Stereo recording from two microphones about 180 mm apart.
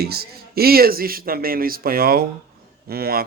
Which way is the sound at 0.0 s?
60° right (ahead or behind).